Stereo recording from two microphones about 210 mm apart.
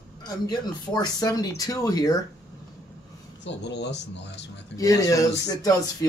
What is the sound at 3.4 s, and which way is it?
Speech, 55° left (ahead or behind).